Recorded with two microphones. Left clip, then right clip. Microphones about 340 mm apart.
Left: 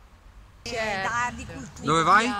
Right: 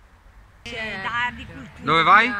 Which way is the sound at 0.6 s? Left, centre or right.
Left.